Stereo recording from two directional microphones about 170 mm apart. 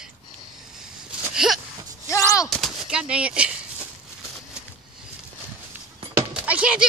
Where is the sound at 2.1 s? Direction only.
20° left (ahead or behind).